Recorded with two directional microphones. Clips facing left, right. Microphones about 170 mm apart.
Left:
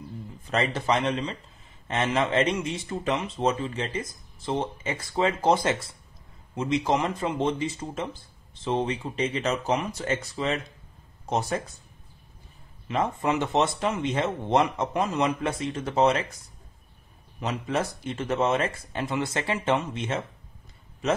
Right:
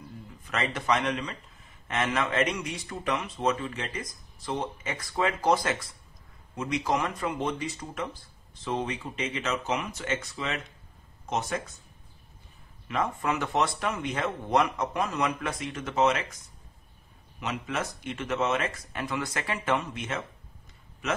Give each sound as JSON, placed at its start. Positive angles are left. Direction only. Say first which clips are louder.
{"t": 0.5, "sound": "speech", "louder": "left 3 dB", "side_deg": 30}
{"t": 12.8, "sound": "speech", "louder": "left 3 dB", "side_deg": 25}
{"t": 17.4, "sound": "speech", "louder": "left 4 dB", "side_deg": 35}